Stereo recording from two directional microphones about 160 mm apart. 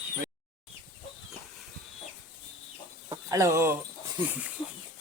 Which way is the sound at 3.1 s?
20° right (ahead or behind).